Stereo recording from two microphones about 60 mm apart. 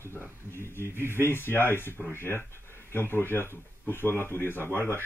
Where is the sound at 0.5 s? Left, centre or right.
Left.